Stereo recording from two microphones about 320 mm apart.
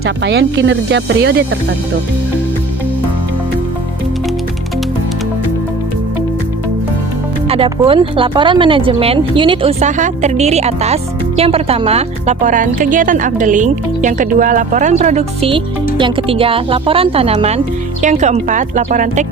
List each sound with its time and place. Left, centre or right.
0.0 s speech: right
7.4 s speech: centre